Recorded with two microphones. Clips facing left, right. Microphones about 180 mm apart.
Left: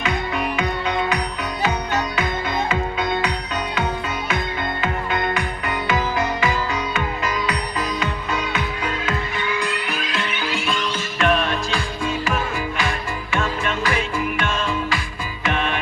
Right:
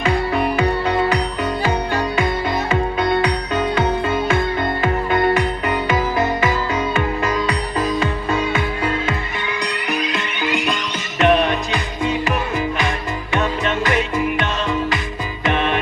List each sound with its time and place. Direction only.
0.0 s music: 30° right (ahead or behind)
4.8 s music: 40° right (ahead or behind)
5.3 s music: 25° right (ahead or behind)